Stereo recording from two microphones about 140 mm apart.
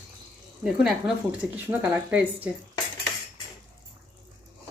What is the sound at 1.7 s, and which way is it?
Speech, 15° right (ahead or behind).